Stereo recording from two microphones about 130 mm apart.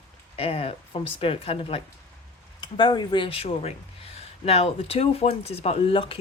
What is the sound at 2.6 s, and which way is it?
Speech, 35° left (ahead or behind).